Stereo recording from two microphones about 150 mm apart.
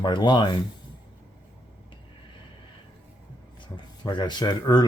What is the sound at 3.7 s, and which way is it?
Speech, 30° left (ahead or behind).